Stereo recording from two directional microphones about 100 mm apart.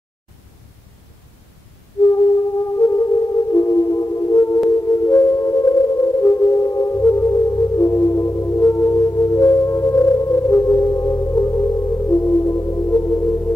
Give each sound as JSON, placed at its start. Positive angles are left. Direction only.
{"t": 2.8, "sound": "music", "side_deg": 30}